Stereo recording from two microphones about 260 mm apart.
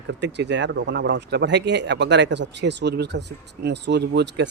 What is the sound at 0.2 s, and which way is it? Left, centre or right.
Speech, right.